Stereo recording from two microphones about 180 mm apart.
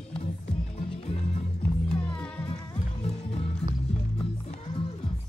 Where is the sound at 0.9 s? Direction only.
30° left (ahead or behind).